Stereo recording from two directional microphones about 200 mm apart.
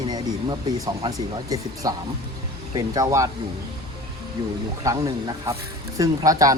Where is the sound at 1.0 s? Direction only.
20° right (ahead or behind).